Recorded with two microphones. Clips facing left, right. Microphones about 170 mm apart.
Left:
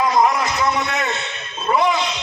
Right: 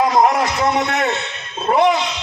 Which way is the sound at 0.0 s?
50° right (ahead or behind).